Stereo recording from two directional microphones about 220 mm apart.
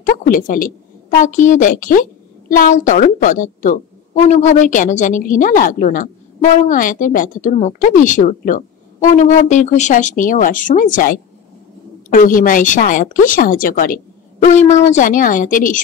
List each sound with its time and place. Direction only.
0.0 s a woman's voice: 35° left (ahead or behind)